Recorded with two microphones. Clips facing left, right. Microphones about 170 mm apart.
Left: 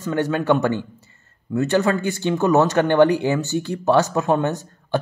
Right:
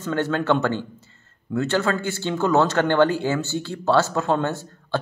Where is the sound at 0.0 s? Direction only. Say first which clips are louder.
Left 2 dB; 10° left (ahead or behind).